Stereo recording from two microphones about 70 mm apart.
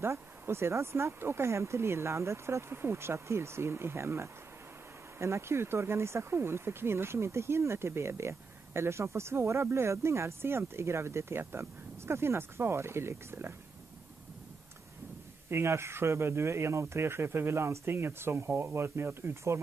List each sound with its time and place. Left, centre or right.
0.0 s speech: right
15.5 s speech: right